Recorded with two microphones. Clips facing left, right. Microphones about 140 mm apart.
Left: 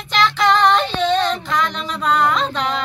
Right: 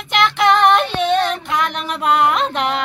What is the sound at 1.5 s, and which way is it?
Music, 60° right (ahead or behind).